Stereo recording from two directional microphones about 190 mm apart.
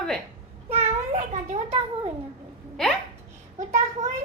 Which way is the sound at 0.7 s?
35° right (ahead or behind).